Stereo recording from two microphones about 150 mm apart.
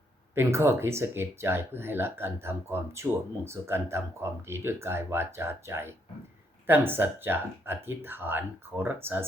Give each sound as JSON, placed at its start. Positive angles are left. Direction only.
{"t": 0.3, "sound": "speech", "side_deg": -15}